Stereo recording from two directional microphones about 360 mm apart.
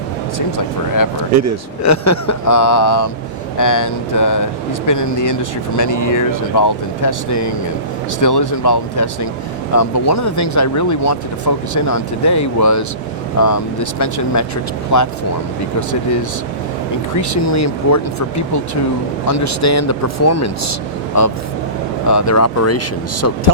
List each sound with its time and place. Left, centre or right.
0.3 s speech: left
1.3 s speech: right
1.8 s speech: left
2.6 s speech: left
3.6 s speech: left
4.9 s speech: left
17.2 s speech: left